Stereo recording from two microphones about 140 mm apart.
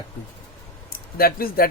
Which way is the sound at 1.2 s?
90° left.